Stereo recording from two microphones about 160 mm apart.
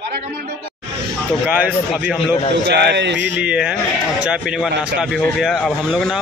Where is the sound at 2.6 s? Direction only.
90° right.